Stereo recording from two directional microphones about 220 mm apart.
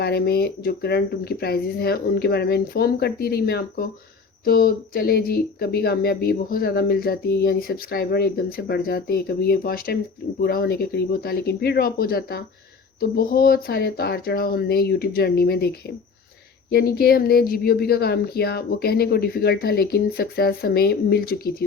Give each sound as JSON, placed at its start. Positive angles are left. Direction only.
{"t": 0.0, "sound": "speech", "side_deg": 45}
{"t": 16.7, "sound": "speech", "side_deg": 45}